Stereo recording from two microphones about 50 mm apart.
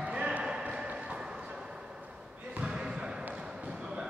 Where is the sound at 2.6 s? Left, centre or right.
Centre.